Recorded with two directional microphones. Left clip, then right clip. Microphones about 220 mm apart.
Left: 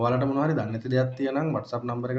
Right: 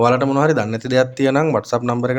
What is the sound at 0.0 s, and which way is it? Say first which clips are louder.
Speech: right 10 dB; 45° right (ahead or behind).